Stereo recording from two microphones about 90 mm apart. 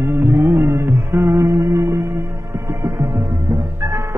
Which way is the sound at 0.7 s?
40° right (ahead or behind).